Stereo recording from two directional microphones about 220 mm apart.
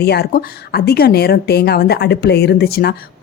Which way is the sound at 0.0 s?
45° left (ahead or behind).